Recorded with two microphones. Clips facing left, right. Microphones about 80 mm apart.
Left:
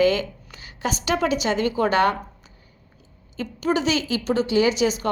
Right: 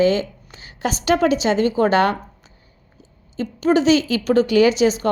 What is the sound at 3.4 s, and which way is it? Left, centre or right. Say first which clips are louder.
A woman's voice: right 6 dB; right.